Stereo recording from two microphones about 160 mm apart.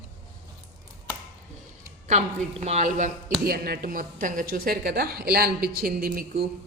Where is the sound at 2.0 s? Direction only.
45° right (ahead or behind).